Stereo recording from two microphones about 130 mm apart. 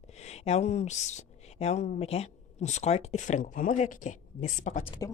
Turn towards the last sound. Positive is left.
turn(degrees=35)  # may be behind; listen again after turning